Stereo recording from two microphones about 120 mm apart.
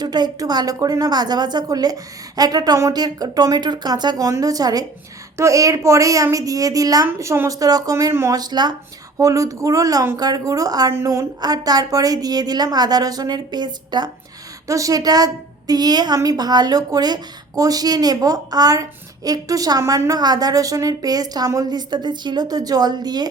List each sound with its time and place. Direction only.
0.0 s a woman's voice: 35° right (ahead or behind)
8.4 s a woman's voice: 35° right (ahead or behind)